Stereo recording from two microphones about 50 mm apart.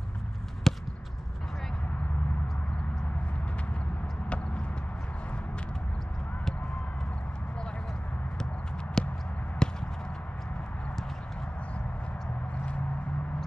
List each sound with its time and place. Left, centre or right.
0.7 s basketball bounce: centre
9.0 s a sound: centre
9.6 s chop: centre